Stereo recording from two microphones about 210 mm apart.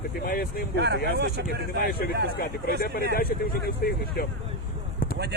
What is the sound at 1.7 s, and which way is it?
Speech, 45° left (ahead or behind).